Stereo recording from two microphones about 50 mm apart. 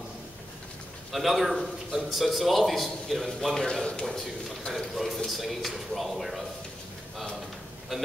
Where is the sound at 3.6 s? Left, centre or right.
Centre.